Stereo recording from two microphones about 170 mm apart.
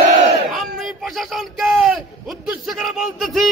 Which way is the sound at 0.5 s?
Centre (ahead or behind).